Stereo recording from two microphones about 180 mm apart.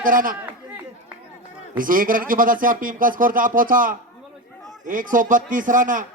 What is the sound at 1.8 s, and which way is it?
A man's voice, 50° right (ahead or behind).